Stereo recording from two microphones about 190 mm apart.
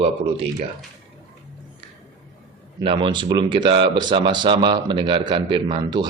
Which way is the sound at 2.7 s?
25° right (ahead or behind).